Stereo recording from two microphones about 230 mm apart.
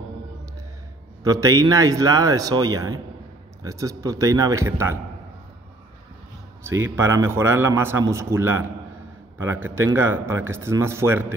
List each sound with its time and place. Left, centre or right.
1.2 s a man's voice: centre
6.6 s a man's voice: centre